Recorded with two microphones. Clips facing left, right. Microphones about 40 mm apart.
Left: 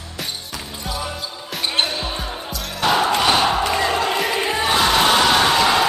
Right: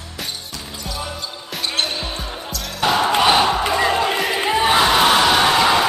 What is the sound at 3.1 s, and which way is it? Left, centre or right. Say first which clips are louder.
Music: right 2 dB; centre.